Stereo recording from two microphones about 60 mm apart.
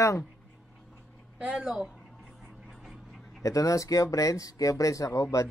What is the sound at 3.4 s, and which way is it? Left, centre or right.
Speech, left.